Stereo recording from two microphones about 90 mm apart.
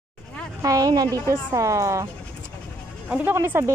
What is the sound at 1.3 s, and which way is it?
Speech, 35° right (ahead or behind).